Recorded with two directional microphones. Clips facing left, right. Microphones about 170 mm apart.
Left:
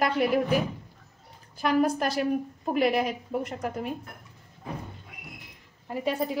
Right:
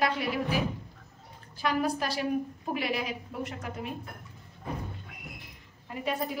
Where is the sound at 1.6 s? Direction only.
50° left (ahead or behind).